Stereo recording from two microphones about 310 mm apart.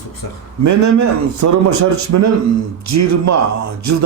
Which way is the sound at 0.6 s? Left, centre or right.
Right.